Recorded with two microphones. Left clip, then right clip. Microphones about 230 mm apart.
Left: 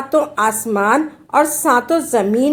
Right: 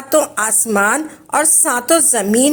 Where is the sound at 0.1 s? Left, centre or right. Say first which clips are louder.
Even; right.